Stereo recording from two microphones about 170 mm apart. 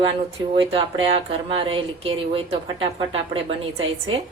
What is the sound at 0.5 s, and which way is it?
A woman's voice, 35° right (ahead or behind).